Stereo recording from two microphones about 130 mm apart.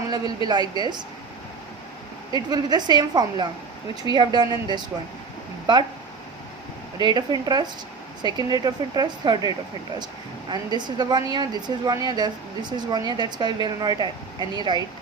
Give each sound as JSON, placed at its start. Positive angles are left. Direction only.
{"t": 0.4, "sound": "a woman's voice", "side_deg": -35}
{"t": 2.3, "sound": "a woman's voice", "side_deg": -30}
{"t": 7.0, "sound": "a woman's voice", "side_deg": -35}